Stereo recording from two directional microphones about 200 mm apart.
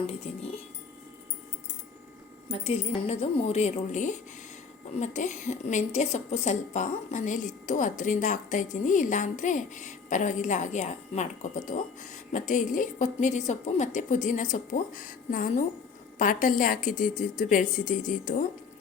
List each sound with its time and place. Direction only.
0.1 s speech: 30° left (ahead or behind)
2.5 s a woman's voice: 30° left (ahead or behind)